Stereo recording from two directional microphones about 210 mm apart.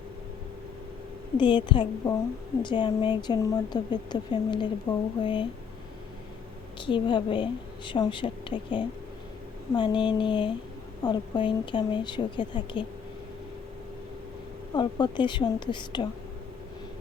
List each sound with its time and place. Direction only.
1.4 s speech: 20° left (ahead or behind)
6.7 s speech: 20° left (ahead or behind)
14.8 s speech: 20° left (ahead or behind)